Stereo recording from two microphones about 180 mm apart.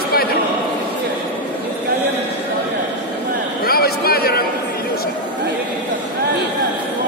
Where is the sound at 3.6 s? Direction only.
55° left (ahead or behind).